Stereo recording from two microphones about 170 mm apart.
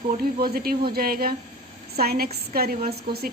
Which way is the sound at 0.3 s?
65° right (ahead or behind).